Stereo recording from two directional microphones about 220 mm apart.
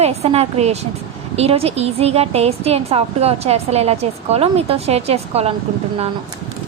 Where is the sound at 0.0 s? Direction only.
30° right (ahead or behind).